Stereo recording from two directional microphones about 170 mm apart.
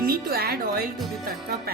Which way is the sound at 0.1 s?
65° right (ahead or behind).